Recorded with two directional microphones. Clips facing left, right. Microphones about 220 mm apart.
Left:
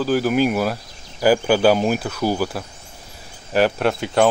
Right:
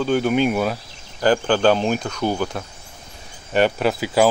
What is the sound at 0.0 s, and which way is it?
Speech, centre (ahead or behind).